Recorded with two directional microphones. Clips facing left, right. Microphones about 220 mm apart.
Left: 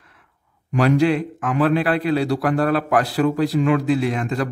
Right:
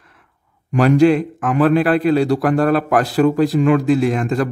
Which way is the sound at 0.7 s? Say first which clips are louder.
Right 5 dB; 45° right (ahead or behind).